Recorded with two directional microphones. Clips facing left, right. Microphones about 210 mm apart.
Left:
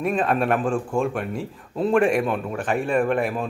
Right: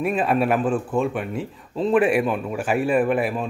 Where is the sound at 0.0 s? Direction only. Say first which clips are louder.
Right 1 dB; 5° right (ahead or behind).